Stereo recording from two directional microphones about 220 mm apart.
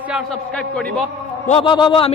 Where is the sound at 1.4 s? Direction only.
25° left (ahead or behind).